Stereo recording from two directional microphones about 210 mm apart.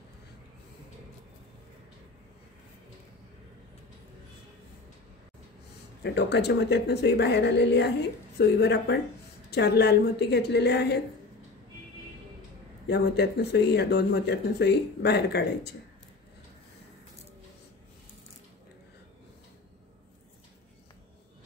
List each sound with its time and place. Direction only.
6.0 s speech: 55° left (ahead or behind)
12.8 s speech: 55° left (ahead or behind)